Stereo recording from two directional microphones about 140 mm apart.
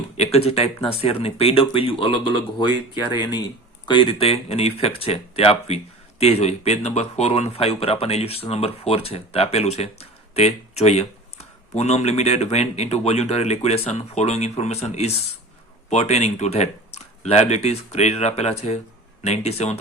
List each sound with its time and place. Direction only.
0.2 s speech: 50° left (ahead or behind)